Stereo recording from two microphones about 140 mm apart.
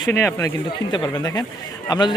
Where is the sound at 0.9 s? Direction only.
35° left (ahead or behind).